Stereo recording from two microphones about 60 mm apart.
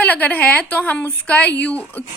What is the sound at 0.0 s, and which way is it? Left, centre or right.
A woman's voice, left.